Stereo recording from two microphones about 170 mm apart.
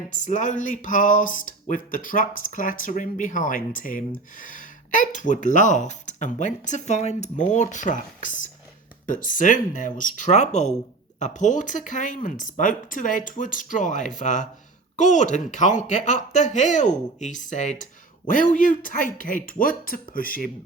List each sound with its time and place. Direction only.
0.1 s speech: 45° left (ahead or behind)